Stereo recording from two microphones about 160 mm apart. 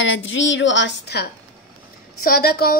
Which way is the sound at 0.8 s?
90° left.